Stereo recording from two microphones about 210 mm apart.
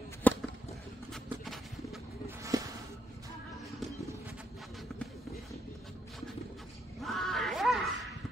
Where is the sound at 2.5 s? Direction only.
15° right (ahead or behind).